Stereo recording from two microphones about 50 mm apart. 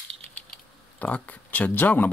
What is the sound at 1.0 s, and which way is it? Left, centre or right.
Speech, left.